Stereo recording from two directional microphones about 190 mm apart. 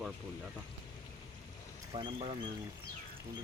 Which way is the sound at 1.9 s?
30° right (ahead or behind).